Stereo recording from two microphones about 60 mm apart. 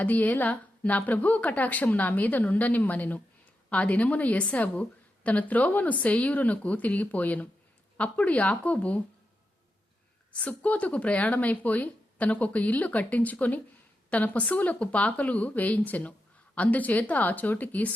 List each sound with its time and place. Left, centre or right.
0.0 s a woman's voice: left
10.3 s a woman's voice: left